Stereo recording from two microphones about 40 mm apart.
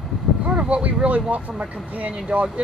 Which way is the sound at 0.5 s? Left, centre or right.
Right.